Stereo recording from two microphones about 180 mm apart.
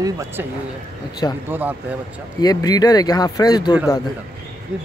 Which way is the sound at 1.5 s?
10° right (ahead or behind).